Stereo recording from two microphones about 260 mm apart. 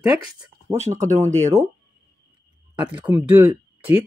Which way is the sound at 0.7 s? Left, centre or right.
Right.